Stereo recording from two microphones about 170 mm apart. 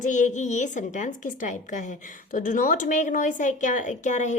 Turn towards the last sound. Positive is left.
turn(degrees=45)  # may be behind; listen again after turning